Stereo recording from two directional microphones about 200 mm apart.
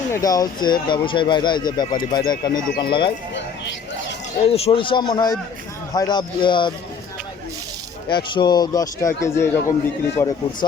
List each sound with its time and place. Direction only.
0.1 s speech: 20° left (ahead or behind)
4.4 s speech: 30° left (ahead or behind)
8.1 s a man's voice: 20° left (ahead or behind)